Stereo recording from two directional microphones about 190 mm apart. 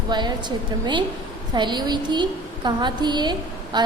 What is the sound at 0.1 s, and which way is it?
Speech, 20° right (ahead or behind).